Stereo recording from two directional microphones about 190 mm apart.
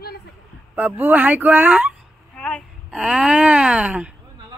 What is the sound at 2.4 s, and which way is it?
Speech, 5° left (ahead or behind).